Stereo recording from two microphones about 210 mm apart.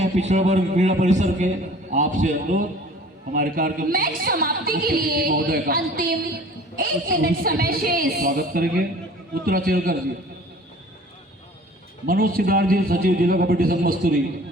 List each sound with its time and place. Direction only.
0.0 s a man's voice: 35° right (ahead or behind)
12.0 s a woman's voice: 45° right (ahead or behind)